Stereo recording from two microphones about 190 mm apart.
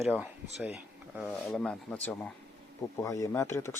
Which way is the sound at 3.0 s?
15° left (ahead or behind).